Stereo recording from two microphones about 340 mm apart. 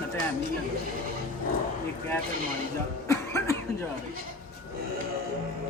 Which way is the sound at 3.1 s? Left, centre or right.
Centre.